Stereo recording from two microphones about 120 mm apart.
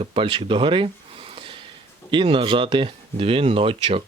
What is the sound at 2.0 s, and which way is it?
Speech, 45° right (ahead or behind).